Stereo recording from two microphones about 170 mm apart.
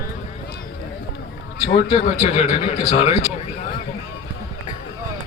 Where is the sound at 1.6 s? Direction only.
40° left (ahead or behind).